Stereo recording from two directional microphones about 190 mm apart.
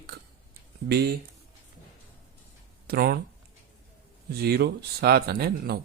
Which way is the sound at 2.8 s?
55° right (ahead or behind).